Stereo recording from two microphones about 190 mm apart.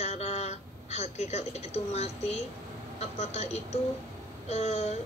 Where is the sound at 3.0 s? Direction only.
35° left (ahead or behind).